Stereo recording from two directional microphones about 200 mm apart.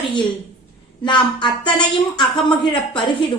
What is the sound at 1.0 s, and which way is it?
A woman's voice, 25° left (ahead or behind).